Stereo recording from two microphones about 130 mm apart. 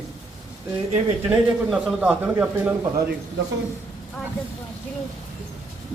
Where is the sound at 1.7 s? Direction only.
10° right (ahead or behind).